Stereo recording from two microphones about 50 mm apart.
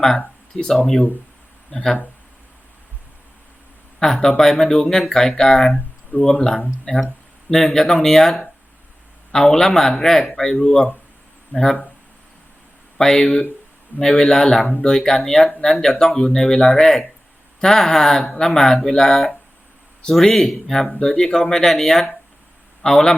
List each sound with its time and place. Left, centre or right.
0.5 s speech: centre
4.0 s speech: centre
5.7 s a sound: left
6.9 s speech: centre
7.5 s speech: centre
13.0 s speech: centre
14.7 s speech: centre